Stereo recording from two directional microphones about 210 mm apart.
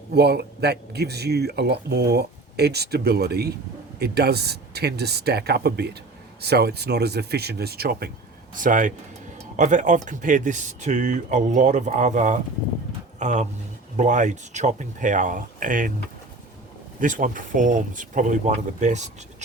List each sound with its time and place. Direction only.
0.1 s speech: 50° right (ahead or behind)
17.0 s speech: 40° right (ahead or behind)